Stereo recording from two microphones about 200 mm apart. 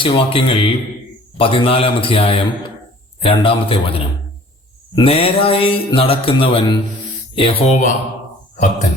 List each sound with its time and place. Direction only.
0.0 s mantra: 25° left (ahead or behind)
7.3 s speech: 25° left (ahead or behind)